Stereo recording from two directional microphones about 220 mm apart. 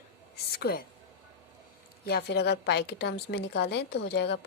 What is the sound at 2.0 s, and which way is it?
A woman's voice, 45° left (ahead or behind).